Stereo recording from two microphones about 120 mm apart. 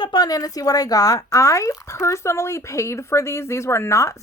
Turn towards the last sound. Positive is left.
turn(degrees=25)  # may be behind; listen again after turning